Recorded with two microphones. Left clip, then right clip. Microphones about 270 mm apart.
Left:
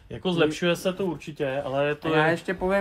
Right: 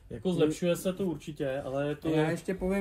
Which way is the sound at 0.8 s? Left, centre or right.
Left.